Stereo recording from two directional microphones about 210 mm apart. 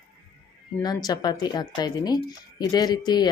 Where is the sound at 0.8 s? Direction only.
20° left (ahead or behind).